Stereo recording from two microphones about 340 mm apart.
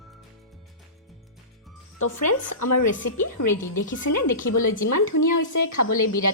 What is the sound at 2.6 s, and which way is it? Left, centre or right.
Speech, left.